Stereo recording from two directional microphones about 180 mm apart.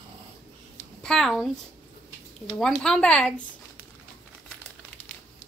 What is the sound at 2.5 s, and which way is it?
Speech, 5° left (ahead or behind).